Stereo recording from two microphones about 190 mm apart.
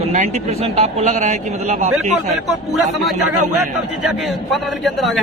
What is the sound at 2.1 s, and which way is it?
Speech, centre (ahead or behind).